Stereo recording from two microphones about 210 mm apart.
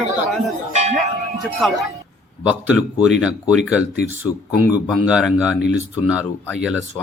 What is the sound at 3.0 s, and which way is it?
Speech, 5° right (ahead or behind).